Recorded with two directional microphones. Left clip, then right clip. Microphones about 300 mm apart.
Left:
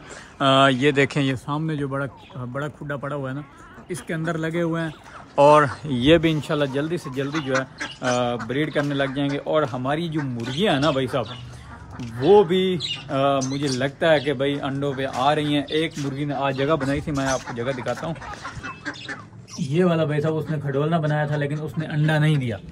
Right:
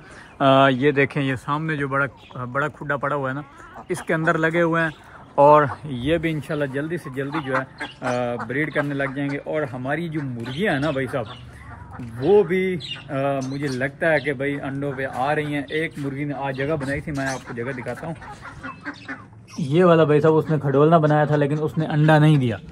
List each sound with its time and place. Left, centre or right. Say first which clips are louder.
0.4 s speech: right 1 dB; centre
5.9 s speech: left 6 dB; left
6.4 s speech: left 2 dB; centre
7.5 s speech: even; centre
8.1 s speech: left 1 dB; centre
12.4 s speech: left 1 dB; centre
19.7 s speech: right 6 dB; centre